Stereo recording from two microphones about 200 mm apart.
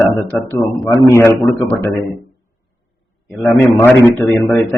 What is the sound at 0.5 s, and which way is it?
Speech, 15° left (ahead or behind).